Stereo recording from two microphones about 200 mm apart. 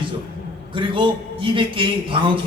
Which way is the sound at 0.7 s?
25° right (ahead or behind).